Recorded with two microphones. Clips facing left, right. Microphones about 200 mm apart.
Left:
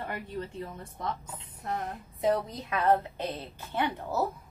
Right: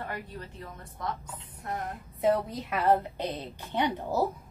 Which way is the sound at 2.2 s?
5° right (ahead or behind).